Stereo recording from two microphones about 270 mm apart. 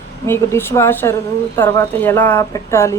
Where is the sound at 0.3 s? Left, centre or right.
Centre.